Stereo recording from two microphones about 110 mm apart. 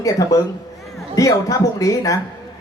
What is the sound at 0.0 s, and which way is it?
Speech, 30° left (ahead or behind).